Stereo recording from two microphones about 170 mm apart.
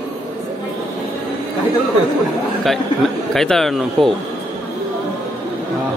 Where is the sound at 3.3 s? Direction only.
Centre (ahead or behind).